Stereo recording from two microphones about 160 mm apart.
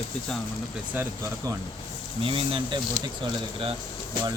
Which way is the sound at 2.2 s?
35° right (ahead or behind).